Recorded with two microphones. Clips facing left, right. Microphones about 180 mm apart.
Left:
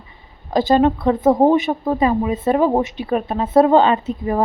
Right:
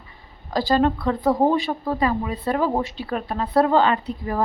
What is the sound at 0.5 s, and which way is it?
Speech, 20° left (ahead or behind).